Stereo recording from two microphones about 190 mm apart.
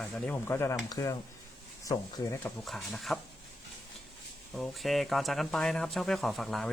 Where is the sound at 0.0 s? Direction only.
5° left (ahead or behind).